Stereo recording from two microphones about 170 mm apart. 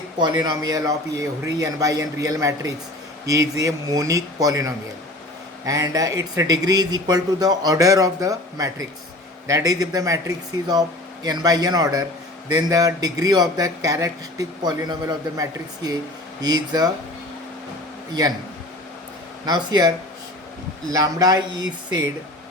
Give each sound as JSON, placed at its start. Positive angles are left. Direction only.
{"t": 0.2, "sound": "a man's voice", "side_deg": -25}
{"t": 19.5, "sound": "a man's voice", "side_deg": -25}
{"t": 20.9, "sound": "a man's voice", "side_deg": -20}